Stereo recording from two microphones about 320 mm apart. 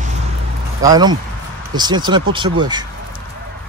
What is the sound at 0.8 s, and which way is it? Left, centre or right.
Speech, centre.